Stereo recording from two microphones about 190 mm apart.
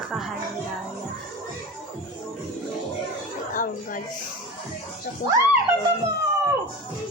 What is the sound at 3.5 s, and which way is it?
Speech, 45° left (ahead or behind).